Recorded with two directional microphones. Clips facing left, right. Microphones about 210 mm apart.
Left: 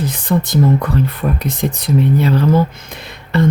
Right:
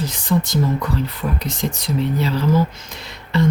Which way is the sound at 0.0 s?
55° left (ahead or behind).